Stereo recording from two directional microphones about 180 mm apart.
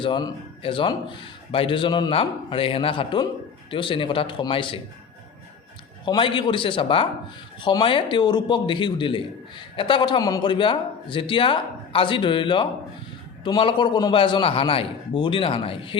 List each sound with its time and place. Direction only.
0.0 s a man's voice: 25° left (ahead or behind)
6.1 s a man's voice: 25° left (ahead or behind)